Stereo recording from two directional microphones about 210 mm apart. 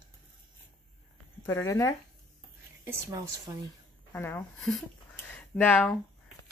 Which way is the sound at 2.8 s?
10° right (ahead or behind).